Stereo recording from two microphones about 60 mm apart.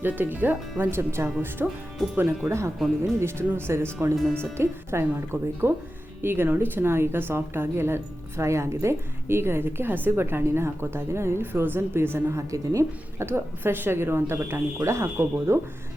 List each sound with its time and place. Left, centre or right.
0.0 s a woman's voice: right
13.2 s a woman's voice: right